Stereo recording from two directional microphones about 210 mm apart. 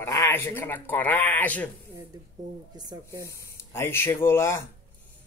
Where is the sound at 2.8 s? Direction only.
20° right (ahead or behind).